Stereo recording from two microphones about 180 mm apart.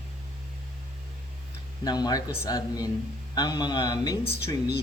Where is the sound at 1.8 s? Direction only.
20° left (ahead or behind).